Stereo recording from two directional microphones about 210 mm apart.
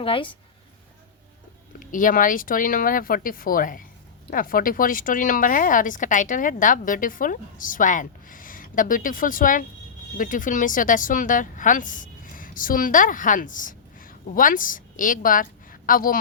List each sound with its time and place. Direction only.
0.0 s a woman's voice: 25° left (ahead or behind)
1.8 s speech: 40° left (ahead or behind)